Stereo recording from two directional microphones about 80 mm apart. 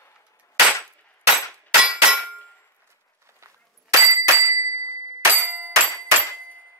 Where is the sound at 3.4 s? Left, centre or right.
Right.